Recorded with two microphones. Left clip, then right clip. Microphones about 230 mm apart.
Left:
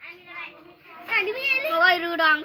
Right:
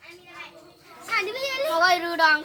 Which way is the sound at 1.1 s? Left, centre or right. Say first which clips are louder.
Left 3 dB; right.